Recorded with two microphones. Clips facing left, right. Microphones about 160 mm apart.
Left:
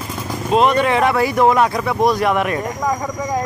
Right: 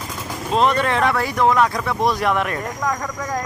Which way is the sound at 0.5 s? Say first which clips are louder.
Left 3 dB; 10° left (ahead or behind).